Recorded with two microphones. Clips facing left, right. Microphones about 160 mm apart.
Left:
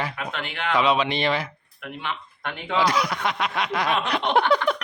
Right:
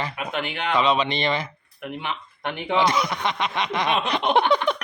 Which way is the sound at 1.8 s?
20° right (ahead or behind).